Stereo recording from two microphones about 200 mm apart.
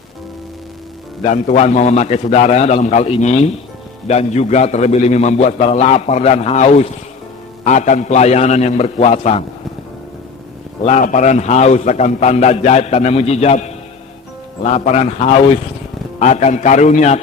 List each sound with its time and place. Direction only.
1.2 s a man's voice: 35° left (ahead or behind)
10.8 s a man's voice: 35° left (ahead or behind)